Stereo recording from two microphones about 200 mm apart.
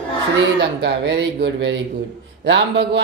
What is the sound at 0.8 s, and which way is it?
Speech, 60° right (ahead or behind).